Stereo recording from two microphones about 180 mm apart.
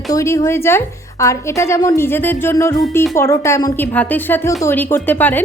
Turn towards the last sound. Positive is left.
turn(degrees=10)  # may be behind; listen again after turning